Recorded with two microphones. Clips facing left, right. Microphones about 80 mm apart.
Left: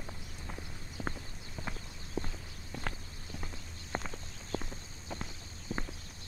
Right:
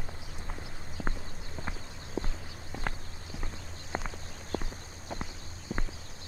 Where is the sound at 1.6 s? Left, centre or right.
Right.